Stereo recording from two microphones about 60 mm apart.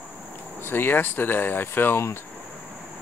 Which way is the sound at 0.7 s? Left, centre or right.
Left.